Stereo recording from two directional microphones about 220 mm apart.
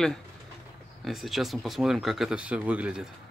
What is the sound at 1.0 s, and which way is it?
Speech, centre (ahead or behind).